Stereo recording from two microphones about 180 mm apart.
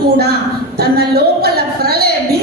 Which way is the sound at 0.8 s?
60° right (ahead or behind).